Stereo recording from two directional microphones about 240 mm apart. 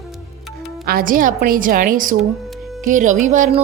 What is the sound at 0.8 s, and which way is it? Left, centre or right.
Speech, right.